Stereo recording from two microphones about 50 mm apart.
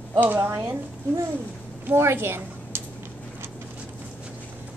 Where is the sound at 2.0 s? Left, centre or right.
Right.